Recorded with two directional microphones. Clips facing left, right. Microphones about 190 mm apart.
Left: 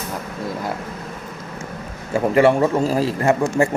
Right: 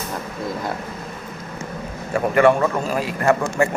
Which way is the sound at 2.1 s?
25° left (ahead or behind).